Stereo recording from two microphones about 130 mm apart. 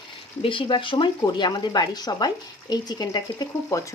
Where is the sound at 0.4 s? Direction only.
40° left (ahead or behind).